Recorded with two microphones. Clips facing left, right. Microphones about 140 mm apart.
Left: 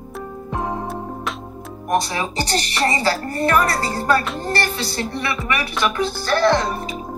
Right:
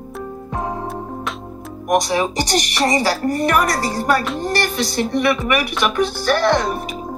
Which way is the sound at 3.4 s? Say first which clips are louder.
Left 2 dB; 15° right (ahead or behind).